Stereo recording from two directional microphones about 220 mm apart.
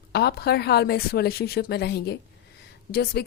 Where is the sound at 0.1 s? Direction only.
50° left (ahead or behind).